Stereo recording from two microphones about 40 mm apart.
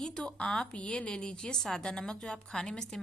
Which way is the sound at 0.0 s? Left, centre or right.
Centre.